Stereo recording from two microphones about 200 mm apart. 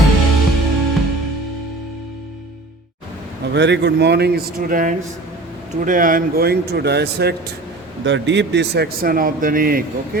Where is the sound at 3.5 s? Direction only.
60° right (ahead or behind).